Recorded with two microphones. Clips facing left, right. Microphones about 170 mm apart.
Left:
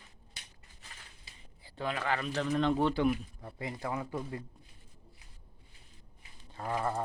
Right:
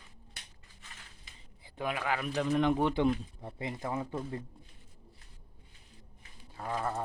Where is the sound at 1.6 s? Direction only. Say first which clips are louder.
Even; 10° right (ahead or behind).